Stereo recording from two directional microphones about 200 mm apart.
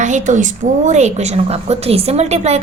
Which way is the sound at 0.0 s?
40° right (ahead or behind).